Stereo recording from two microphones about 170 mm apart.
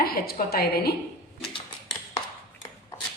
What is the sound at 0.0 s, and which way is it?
Speech, 60° left (ahead or behind).